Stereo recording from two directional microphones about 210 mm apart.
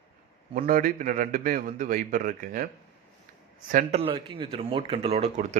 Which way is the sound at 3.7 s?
35° right (ahead or behind).